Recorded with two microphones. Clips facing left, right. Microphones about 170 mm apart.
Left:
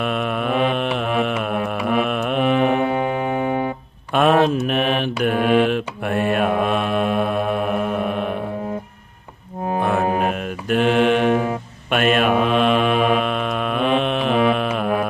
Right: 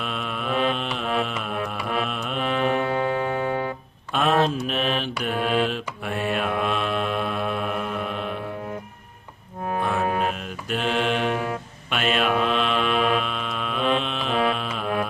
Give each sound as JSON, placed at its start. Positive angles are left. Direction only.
{"t": 0.0, "sound": "mantra", "side_deg": 60}
{"t": 2.6, "sound": "music", "side_deg": 15}
{"t": 4.1, "sound": "mantra", "side_deg": 60}
{"t": 10.2, "sound": "mantra", "side_deg": 55}